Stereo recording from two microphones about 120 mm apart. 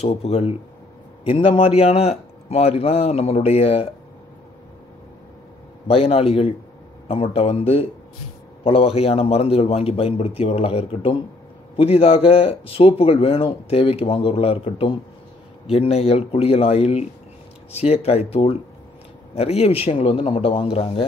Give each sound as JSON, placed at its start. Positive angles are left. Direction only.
{"t": 0.0, "sound": "a man's voice", "side_deg": 55}
{"t": 5.9, "sound": "a man's voice", "side_deg": 55}